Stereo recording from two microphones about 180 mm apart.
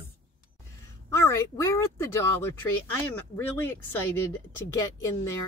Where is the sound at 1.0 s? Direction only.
15° left (ahead or behind).